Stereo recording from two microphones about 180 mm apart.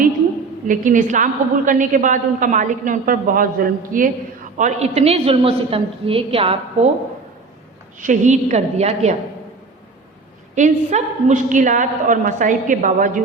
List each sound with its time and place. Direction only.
0.7 s a woman's voice: 45° right (ahead or behind); by 6.6 s 30° right (ahead or behind)
8.0 s a woman's voice: 45° right (ahead or behind)
10.5 s a woman's voice: 40° right (ahead or behind)